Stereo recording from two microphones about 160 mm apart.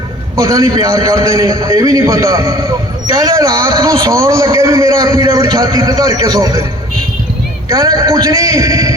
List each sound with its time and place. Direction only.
0.3 s a man's voice: 20° right (ahead or behind)
7.7 s a man's voice: 20° right (ahead or behind)